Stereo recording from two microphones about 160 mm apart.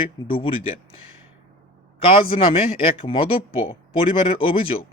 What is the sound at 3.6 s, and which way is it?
Speech, 35° left (ahead or behind).